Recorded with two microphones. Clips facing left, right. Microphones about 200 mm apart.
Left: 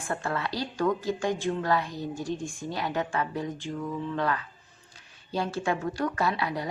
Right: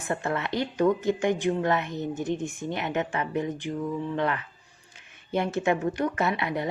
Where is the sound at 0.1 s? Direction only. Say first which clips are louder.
Right 3 dB; 20° right (ahead or behind).